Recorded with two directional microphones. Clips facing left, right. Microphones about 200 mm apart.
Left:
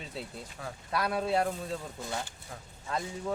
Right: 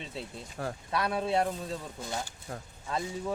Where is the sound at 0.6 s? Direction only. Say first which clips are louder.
Right 7 dB; 50° right (ahead or behind).